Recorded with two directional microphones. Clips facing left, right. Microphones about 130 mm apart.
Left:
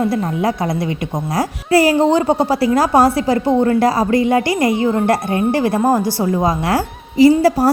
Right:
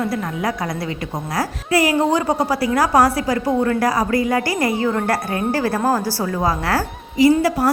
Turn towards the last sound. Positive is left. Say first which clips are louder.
# left 4 dB
turn(degrees=30)  # may be behind; listen again after turning